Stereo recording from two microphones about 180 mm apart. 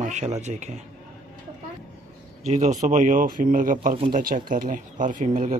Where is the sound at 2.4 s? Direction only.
40° right (ahead or behind).